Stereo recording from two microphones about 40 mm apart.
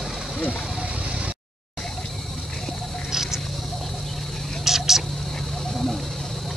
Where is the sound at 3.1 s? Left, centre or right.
Centre.